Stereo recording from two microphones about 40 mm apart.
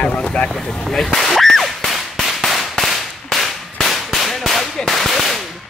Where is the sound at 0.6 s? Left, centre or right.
Centre.